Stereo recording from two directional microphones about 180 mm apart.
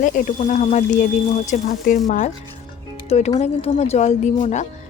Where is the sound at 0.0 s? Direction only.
45° left (ahead or behind).